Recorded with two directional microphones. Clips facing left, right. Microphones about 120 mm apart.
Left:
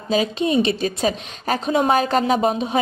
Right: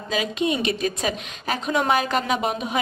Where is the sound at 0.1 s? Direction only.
35° left (ahead or behind).